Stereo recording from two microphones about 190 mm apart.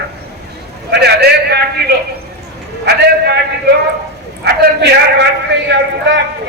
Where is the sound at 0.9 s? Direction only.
60° right (ahead or behind).